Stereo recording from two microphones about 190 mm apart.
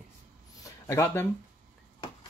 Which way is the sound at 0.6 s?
15° left (ahead or behind).